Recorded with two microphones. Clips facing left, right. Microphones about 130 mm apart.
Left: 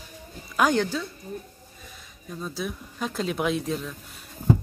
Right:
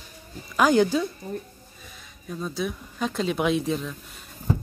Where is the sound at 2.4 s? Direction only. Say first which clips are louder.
Right 3 dB; centre (ahead or behind).